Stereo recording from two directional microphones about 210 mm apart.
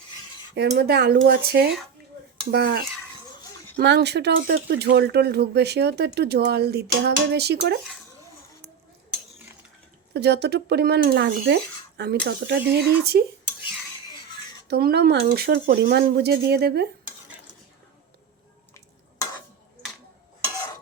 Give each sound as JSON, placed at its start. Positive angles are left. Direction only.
{"t": 0.5, "sound": "speech", "side_deg": -50}
{"t": 10.2, "sound": "speech", "side_deg": -50}
{"t": 14.7, "sound": "speech", "side_deg": -50}